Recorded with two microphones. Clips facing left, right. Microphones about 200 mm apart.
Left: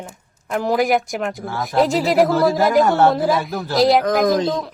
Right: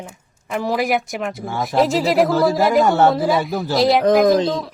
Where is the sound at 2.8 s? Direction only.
10° right (ahead or behind).